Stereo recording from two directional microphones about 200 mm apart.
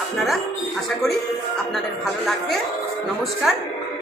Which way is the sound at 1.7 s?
Centre (ahead or behind).